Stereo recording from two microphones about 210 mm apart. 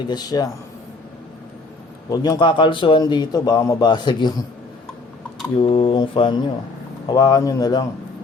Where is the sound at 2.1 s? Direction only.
20° left (ahead or behind).